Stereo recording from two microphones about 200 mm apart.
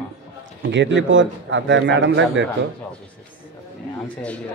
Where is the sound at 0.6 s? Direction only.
65° right (ahead or behind).